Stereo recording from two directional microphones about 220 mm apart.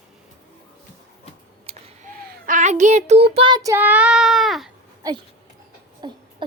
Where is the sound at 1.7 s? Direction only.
25° right (ahead or behind).